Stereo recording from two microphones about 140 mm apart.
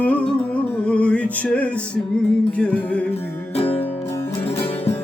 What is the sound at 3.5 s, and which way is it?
Music, 45° left (ahead or behind).